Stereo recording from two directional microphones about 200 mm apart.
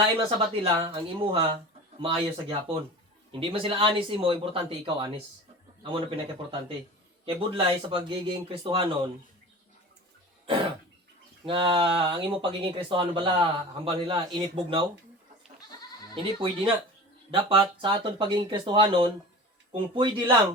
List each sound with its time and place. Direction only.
0.0 s speech: 25° right (ahead or behind)
7.3 s speech: 25° right (ahead or behind)
11.4 s speech: 25° right (ahead or behind)
16.1 s speech: 25° right (ahead or behind)